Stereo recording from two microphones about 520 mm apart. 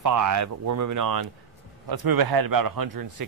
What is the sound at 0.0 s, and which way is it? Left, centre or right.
Speech, right.